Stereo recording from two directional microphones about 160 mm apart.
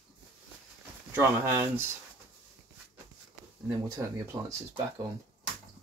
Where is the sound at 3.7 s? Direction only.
20° right (ahead or behind).